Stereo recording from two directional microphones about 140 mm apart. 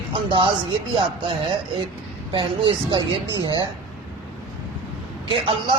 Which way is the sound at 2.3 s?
35° right (ahead or behind).